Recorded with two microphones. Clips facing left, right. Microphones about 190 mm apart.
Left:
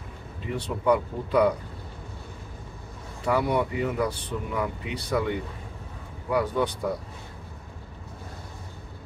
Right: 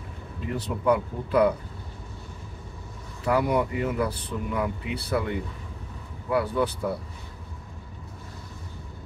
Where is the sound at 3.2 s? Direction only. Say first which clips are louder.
Right 1 dB; 5° right (ahead or behind).